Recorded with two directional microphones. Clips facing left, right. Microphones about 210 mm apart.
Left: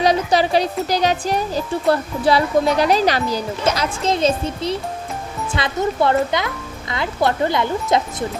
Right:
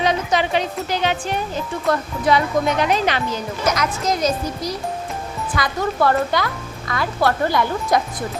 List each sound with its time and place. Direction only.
0.0 s speech: 35° left (ahead or behind)